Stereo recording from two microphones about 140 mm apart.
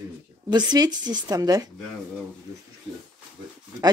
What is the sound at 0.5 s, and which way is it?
A woman's voice, 30° right (ahead or behind).